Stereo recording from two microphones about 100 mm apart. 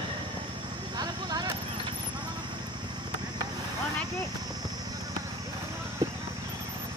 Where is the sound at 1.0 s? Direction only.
45° right (ahead or behind).